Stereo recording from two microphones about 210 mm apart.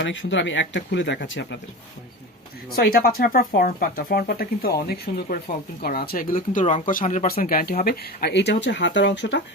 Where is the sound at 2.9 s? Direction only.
45° left (ahead or behind).